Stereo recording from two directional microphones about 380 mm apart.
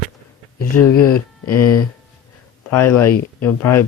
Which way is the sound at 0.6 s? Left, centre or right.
Left.